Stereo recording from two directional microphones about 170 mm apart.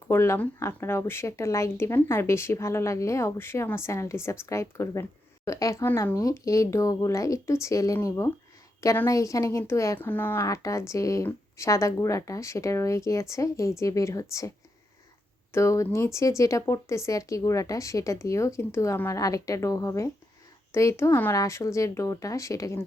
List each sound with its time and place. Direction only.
0.1 s speech: 15° left (ahead or behind)
15.5 s speech: 15° left (ahead or behind)